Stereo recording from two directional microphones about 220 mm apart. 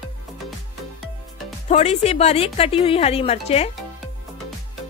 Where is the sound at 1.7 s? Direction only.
30° left (ahead or behind).